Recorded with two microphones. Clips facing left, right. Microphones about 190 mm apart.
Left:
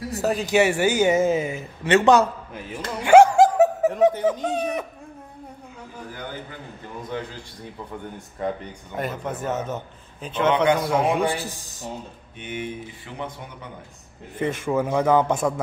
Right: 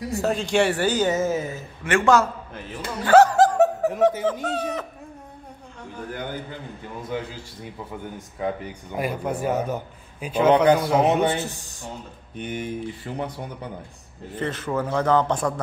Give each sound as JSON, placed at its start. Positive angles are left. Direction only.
{"t": 0.2, "sound": "speech", "side_deg": 5}
{"t": 3.0, "sound": "snicker", "side_deg": 15}
{"t": 4.5, "sound": "speech", "side_deg": 10}
{"t": 7.0, "sound": "speech", "side_deg": -10}
{"t": 10.5, "sound": "speech", "side_deg": -40}
{"t": 10.8, "sound": "a man's voice", "side_deg": 0}
{"t": 11.1, "sound": "speech", "side_deg": -25}
{"t": 12.4, "sound": "speech", "side_deg": -40}
{"t": 14.4, "sound": "speech", "side_deg": 10}